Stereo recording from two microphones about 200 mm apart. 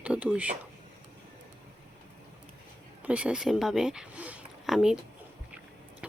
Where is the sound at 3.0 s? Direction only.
5° right (ahead or behind).